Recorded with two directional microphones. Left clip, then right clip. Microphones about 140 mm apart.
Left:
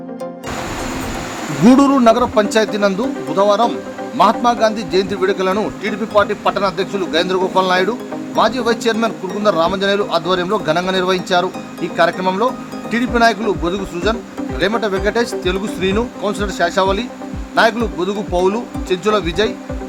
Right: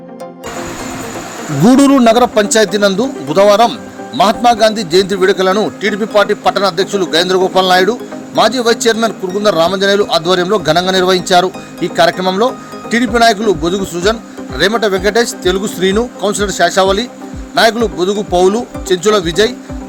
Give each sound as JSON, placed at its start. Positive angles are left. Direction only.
{"t": 1.6, "sound": "speech", "side_deg": -30}
{"t": 3.3, "sound": "speech", "side_deg": -45}
{"t": 4.2, "sound": "speech", "side_deg": -30}